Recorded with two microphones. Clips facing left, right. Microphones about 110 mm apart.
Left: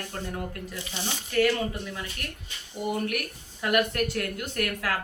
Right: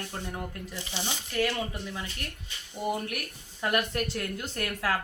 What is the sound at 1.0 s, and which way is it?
Speech, 15° right (ahead or behind).